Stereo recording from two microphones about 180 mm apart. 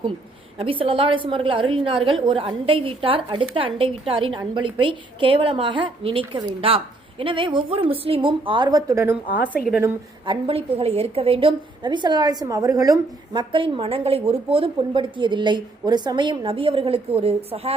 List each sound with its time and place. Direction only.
0.6 s a woman's voice: 30° right (ahead or behind); by 9.8 s centre (ahead or behind)
10.2 s a woman's voice: 30° right (ahead or behind)